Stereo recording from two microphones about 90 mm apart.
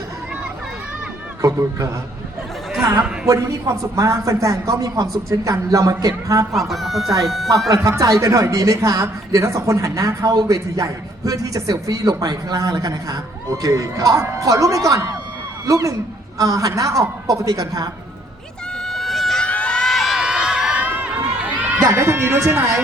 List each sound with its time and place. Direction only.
1.4 s a woman's voice: 35° right (ahead or behind)
3.2 s a woman's voice: 40° right (ahead or behind)
6.5 s speech: centre (ahead or behind)
7.7 s a woman's voice: 40° right (ahead or behind)
18.8 s a sound: centre (ahead or behind)
19.5 s crowd: 10° left (ahead or behind); by 21.8 s 15° right (ahead or behind)
21.8 s speech: 30° right (ahead or behind)